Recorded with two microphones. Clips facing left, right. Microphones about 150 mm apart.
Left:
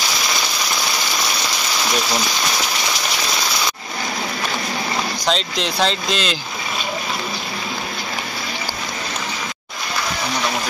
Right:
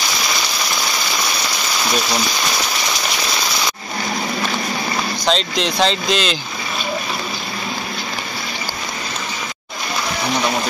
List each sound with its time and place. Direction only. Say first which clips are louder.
5.2 s speech: right 4 dB; 5° left (ahead or behind)